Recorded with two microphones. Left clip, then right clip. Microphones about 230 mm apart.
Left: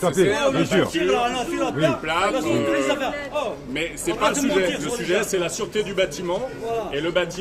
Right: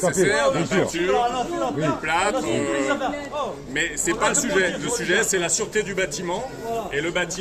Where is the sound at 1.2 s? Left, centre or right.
Left.